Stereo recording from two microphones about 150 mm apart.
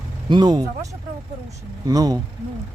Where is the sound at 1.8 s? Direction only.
25° right (ahead or behind).